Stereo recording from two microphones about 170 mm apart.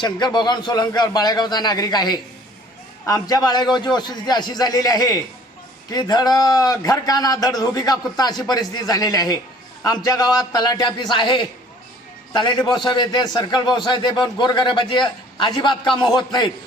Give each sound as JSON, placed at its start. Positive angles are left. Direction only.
{"t": 0.0, "sound": "a man's voice", "side_deg": 25}